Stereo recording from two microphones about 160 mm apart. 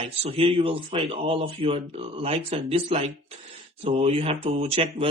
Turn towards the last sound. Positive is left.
turn(degrees=-35)  # may be behind; listen again after turning